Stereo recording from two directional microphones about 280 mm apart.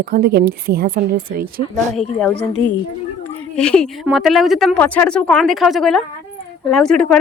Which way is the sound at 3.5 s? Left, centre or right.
Centre.